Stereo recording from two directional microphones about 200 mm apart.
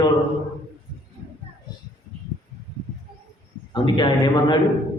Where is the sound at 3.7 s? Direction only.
20° left (ahead or behind).